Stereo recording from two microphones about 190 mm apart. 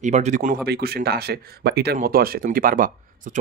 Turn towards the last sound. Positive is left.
turn(degrees=-45)  # may be behind; listen again after turning